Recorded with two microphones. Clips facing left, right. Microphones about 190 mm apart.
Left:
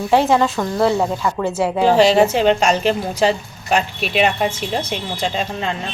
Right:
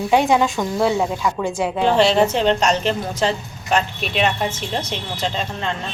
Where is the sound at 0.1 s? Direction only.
Centre (ahead or behind).